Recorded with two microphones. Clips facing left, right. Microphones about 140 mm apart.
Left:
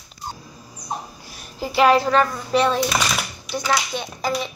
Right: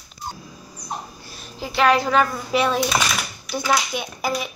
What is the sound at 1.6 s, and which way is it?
A child's voice, 5° left (ahead or behind).